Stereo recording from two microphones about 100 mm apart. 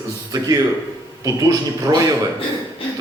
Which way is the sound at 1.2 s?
35° right (ahead or behind).